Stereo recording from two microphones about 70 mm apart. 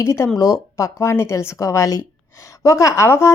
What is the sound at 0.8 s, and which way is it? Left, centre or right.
Speech, left.